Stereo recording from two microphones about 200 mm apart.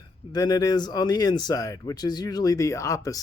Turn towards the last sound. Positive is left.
turn(degrees=15)  # may be behind; listen again after turning